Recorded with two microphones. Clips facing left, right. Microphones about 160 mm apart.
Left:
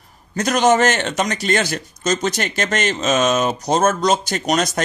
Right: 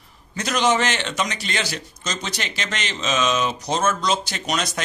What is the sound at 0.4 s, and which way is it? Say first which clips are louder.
Speech: left 5 dB; 45° left (ahead or behind).